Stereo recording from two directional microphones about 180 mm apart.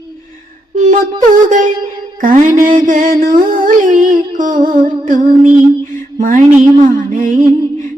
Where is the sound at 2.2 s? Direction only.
45° right (ahead or behind).